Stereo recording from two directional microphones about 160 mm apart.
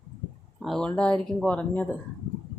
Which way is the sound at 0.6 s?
5° left (ahead or behind).